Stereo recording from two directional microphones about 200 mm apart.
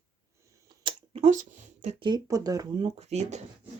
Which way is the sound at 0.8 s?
30° right (ahead or behind).